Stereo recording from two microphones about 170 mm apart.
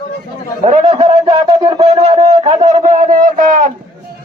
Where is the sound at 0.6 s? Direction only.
40° right (ahead or behind).